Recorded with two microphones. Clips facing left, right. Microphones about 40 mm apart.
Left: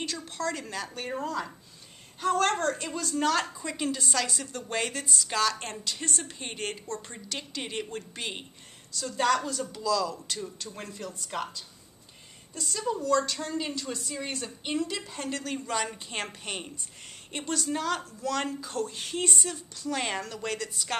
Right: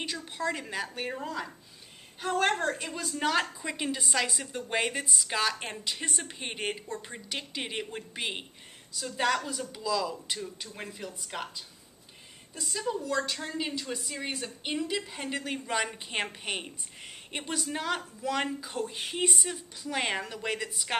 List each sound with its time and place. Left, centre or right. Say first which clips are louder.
0.0 s a woman's voice: even; centre
12.5 s a woman's voice: left 2 dB; centre